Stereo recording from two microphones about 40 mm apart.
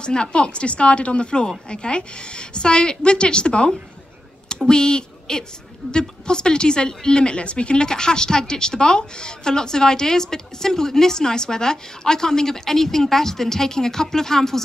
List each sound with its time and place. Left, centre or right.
0.0 s a woman's voice: left